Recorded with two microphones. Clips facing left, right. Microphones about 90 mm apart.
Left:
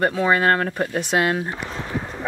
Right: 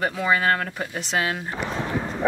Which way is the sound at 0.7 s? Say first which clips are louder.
Left 5 dB; 55° left (ahead or behind).